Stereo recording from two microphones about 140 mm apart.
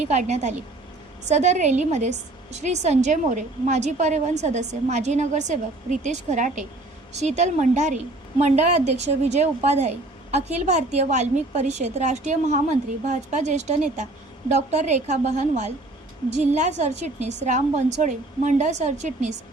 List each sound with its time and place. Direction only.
0.0 s a woman's voice: 55° right (ahead or behind)
11.0 s a woman's voice: 55° right (ahead or behind)